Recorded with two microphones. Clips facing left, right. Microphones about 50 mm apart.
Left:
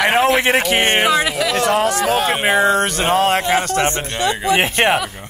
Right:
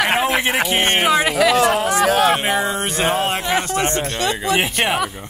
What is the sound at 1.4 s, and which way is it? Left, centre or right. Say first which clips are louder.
Speech: right 1 dB; centre.